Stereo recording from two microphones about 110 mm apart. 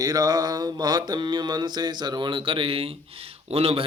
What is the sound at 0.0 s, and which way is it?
Mantra, 35° right (ahead or behind).